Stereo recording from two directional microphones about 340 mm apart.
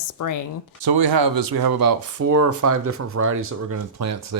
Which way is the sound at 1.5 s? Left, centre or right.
Right.